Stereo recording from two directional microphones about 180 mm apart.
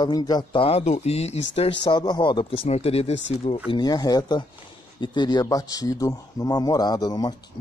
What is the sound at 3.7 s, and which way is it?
Speech, 25° left (ahead or behind).